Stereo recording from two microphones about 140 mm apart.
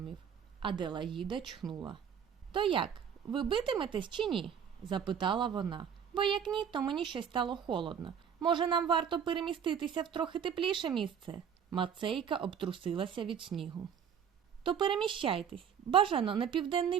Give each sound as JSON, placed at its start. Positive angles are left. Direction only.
{"t": 0.6, "sound": "a woman's voice", "side_deg": -35}